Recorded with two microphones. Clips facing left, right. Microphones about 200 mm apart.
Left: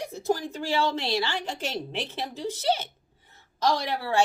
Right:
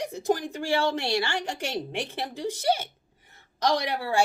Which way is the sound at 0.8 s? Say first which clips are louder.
Even; 50° right (ahead or behind).